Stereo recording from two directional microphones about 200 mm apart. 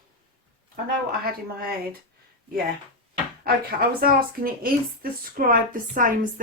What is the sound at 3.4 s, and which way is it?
A woman's voice, 50° right (ahead or behind).